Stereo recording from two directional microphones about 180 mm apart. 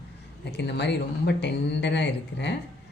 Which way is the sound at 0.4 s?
70° left (ahead or behind).